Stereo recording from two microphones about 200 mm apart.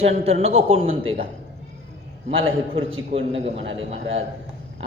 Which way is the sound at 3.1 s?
30° right (ahead or behind).